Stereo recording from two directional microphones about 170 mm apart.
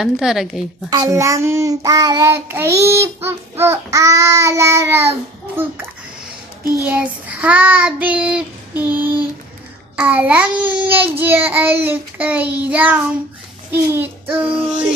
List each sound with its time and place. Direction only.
0.0 s speech: centre (ahead or behind)
0.9 s child singing: 20° right (ahead or behind)